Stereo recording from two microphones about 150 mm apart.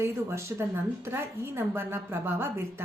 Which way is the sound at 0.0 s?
20° right (ahead or behind).